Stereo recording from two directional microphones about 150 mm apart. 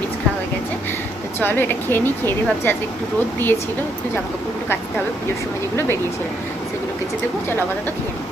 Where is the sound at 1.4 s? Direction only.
15° left (ahead or behind).